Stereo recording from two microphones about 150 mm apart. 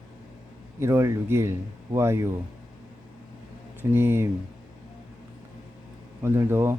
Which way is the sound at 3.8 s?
15° right (ahead or behind).